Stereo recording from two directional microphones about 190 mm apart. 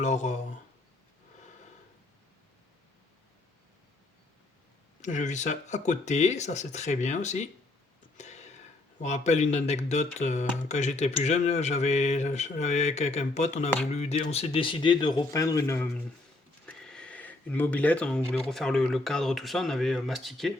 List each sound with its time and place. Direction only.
0.0 s speech: 35° left (ahead or behind)
5.0 s a man's voice: 40° left (ahead or behind); by 15.9 s 15° left (ahead or behind)
16.6 s a sound: 5° left (ahead or behind)
18.4 s speech: centre (ahead or behind)